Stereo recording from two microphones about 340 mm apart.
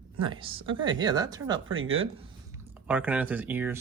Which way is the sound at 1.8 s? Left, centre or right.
Right.